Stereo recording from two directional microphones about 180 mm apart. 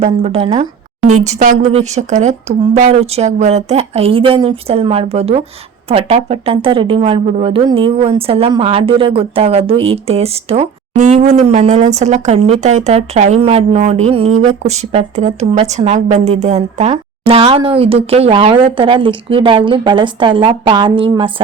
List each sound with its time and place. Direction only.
0.0 s a woman's voice: 35° right (ahead or behind)